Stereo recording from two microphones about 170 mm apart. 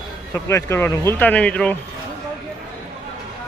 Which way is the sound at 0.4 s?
15° left (ahead or behind).